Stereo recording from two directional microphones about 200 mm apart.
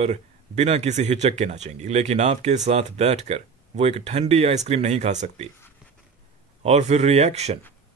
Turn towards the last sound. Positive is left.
turn(degrees=-35)  # may be behind; listen again after turning